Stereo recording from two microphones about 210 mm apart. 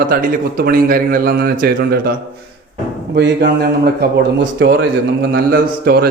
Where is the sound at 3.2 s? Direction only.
55° right (ahead or behind).